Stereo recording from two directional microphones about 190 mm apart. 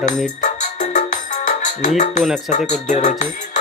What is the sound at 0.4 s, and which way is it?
Music, 40° left (ahead or behind).